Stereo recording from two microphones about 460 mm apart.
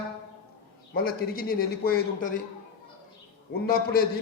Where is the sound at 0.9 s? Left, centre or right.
Centre.